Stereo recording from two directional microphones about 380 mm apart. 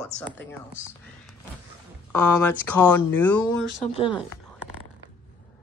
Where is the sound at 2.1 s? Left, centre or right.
Left.